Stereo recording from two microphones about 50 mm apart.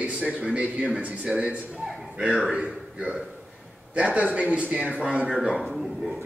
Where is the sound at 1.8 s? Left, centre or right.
Centre.